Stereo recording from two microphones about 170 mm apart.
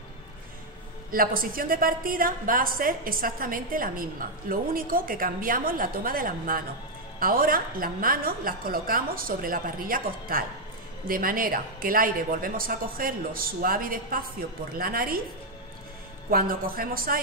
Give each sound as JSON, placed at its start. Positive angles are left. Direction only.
{"t": 1.1, "sound": "a woman's voice", "side_deg": -55}
{"t": 16.3, "sound": "a woman's voice", "side_deg": -60}